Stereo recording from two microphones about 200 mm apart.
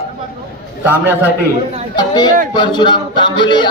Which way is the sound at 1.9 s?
20° left (ahead or behind).